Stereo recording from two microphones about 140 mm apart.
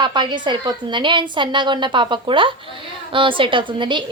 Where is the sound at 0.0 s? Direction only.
35° right (ahead or behind).